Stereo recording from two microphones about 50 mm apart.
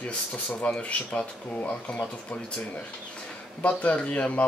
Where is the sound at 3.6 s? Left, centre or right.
Left.